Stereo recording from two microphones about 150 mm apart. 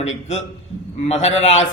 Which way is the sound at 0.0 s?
50° left (ahead or behind).